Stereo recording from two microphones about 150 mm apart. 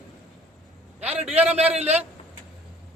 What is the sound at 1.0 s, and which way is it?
Speech, 45° right (ahead or behind).